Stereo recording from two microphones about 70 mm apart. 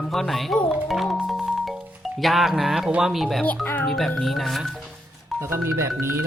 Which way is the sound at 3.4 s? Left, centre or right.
Left.